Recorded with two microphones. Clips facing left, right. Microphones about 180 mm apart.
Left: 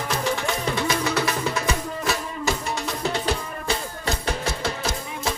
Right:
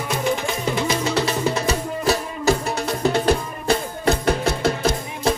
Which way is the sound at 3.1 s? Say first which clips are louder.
Right 6 dB; 50° right (ahead or behind).